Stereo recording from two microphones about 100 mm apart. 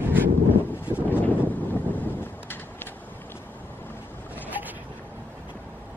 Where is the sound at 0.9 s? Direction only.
20° left (ahead or behind).